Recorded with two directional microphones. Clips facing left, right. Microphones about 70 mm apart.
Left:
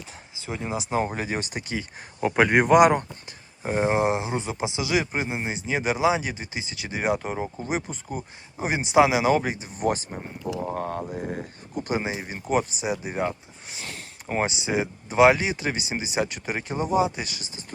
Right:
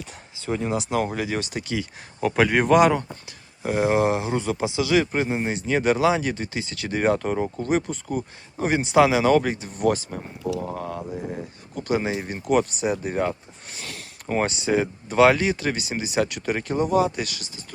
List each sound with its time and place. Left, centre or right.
0.4 s speech: centre; by 1.9 s left
2.2 s speech: centre
3.6 s speech: left
9.6 s speech: centre
10.1 s speech: left
10.8 s mantra: left
11.8 s speech: left
12.2 s speech: centre